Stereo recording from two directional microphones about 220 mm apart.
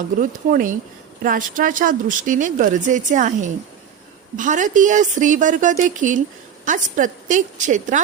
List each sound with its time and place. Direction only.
0.2 s a woman's voice: 35° right (ahead or behind)